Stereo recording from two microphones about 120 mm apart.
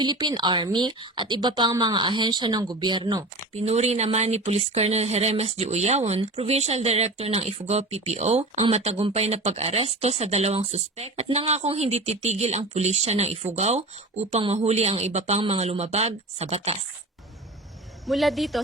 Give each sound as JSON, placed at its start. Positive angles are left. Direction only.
{"t": 0.0, "sound": "a woman's voice", "side_deg": -40}
{"t": 3.5, "sound": "speech", "side_deg": -65}
{"t": 18.0, "sound": "a woman's voice", "side_deg": 0}